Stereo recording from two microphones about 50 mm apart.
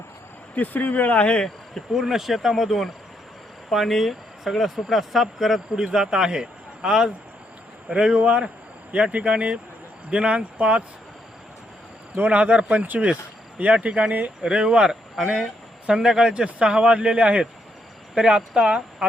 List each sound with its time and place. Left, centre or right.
0.5 s speech: left
1.2 s speech: left
1.9 s speech: centre
12.3 s speech: right